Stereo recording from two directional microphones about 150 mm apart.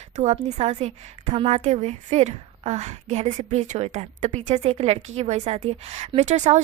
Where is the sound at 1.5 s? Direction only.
50° right (ahead or behind).